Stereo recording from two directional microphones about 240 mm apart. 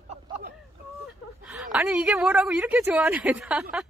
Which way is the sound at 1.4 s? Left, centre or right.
Centre.